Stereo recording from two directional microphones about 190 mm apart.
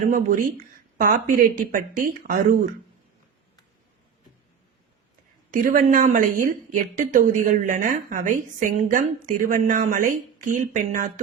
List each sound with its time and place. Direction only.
0.0 s speech: 45° right (ahead or behind)
5.5 s speech: 45° right (ahead or behind)